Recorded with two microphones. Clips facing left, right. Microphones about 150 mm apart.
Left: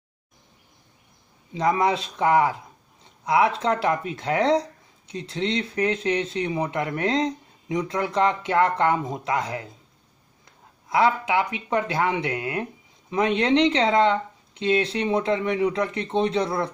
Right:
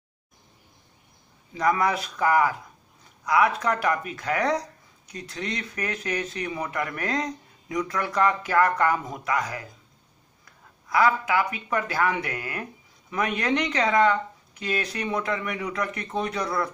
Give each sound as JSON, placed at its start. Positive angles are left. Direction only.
{"t": 1.5, "sound": "speech", "side_deg": 25}